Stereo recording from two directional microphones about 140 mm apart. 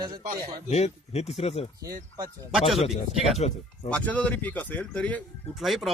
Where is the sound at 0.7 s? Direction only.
50° left (ahead or behind).